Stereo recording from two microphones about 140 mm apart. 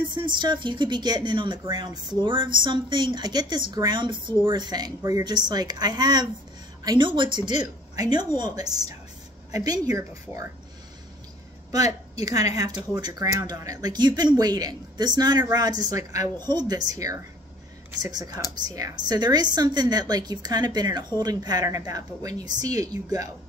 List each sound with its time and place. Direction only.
0.1 s speech: 35° right (ahead or behind)
11.7 s a woman's voice: 25° right (ahead or behind)